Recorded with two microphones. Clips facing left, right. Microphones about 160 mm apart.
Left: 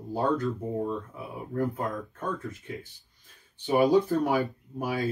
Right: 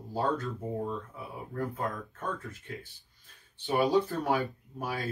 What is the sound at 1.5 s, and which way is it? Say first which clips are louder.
Speech: left 5 dB; 20° left (ahead or behind).